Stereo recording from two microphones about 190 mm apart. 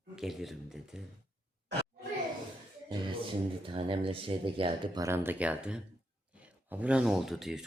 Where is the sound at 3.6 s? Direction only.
25° right (ahead or behind).